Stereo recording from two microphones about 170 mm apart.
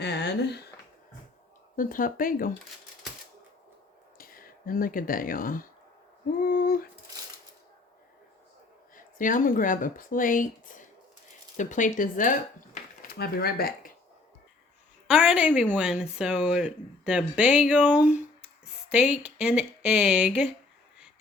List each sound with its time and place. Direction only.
0.0 s speech: 80° left
1.7 s speech: 55° left (ahead or behind)
4.2 s speech: 60° left (ahead or behind)
6.4 s a sound: 55° left (ahead or behind)
9.0 s speech: 55° left (ahead or behind)
13.1 s speech: 65° left (ahead or behind)
15.0 s a woman's voice: 5° right (ahead or behind)